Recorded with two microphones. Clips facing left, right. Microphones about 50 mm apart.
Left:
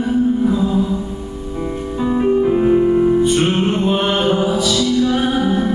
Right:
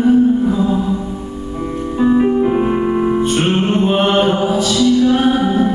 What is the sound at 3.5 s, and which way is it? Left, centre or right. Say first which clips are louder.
Music: right 2 dB; centre.